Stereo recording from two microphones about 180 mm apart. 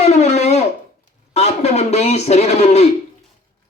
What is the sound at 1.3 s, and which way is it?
Speech, 35° left (ahead or behind).